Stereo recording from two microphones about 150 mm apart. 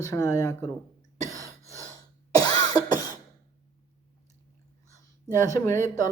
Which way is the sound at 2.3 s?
25° left (ahead or behind).